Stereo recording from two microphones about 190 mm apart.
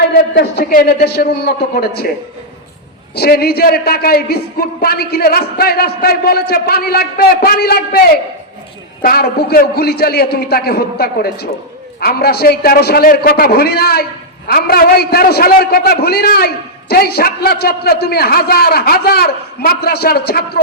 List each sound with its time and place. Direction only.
0.1 s a man's voice: 60° left (ahead or behind)
3.2 s a man's voice: 55° left (ahead or behind)